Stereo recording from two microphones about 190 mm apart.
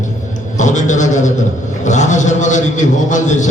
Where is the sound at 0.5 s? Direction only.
40° left (ahead or behind).